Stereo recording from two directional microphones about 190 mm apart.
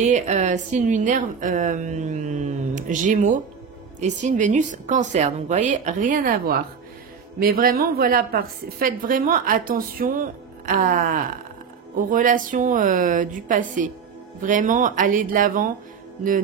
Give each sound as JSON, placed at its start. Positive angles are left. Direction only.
{"t": 0.0, "sound": "a woman's voice", "side_deg": -40}